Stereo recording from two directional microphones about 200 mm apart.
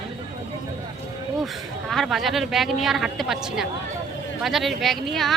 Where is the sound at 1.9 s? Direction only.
Centre (ahead or behind).